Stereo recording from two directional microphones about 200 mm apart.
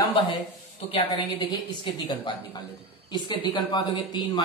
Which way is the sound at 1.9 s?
25° left (ahead or behind).